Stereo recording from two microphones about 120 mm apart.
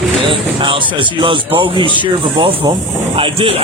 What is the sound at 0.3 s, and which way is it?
Speech, 45° right (ahead or behind).